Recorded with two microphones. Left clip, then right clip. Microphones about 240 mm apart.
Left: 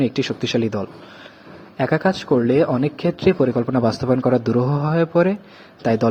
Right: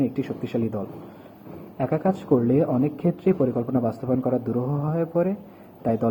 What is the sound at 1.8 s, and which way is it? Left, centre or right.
A man's voice, left.